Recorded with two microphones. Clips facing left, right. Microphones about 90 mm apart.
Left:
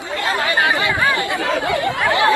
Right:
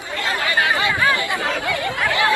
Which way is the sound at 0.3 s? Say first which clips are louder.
Left 2 dB; 25° left (ahead or behind).